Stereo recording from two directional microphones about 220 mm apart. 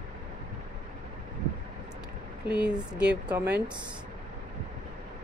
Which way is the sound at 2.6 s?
5° right (ahead or behind).